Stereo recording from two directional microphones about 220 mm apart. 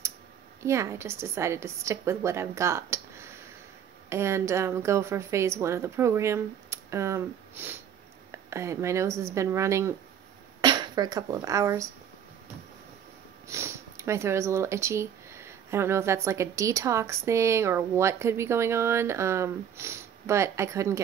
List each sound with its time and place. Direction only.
0.6 s speech: 10° right (ahead or behind)
13.5 s speech: 10° right (ahead or behind)